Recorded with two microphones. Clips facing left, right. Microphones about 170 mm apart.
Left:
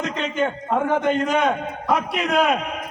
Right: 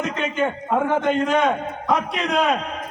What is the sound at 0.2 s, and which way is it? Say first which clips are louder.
A man's voice: left 1 dB; 5° right (ahead or behind).